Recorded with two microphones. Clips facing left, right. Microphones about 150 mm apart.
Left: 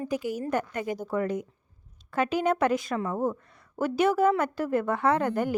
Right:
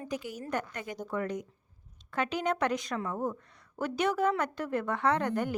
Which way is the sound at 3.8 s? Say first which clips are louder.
Left 6 dB; 5° left (ahead or behind).